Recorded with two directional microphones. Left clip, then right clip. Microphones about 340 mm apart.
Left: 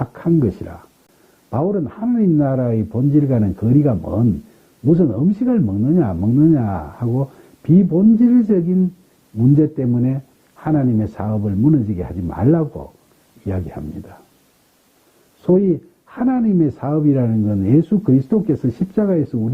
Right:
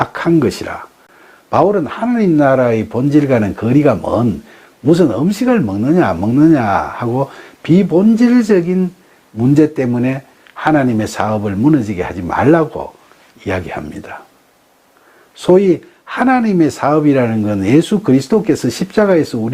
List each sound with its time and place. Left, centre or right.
0.0 s speech: centre
5.3 s speech: centre
16.0 s speech: centre